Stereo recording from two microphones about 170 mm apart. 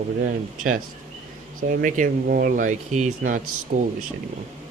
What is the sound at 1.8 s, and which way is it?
Speech, 55° right (ahead or behind).